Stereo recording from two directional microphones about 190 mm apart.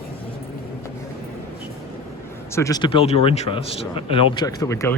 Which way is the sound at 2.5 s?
20° left (ahead or behind).